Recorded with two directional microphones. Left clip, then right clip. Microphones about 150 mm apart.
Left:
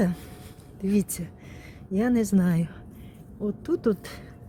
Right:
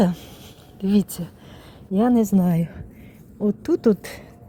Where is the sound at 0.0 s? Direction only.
15° right (ahead or behind).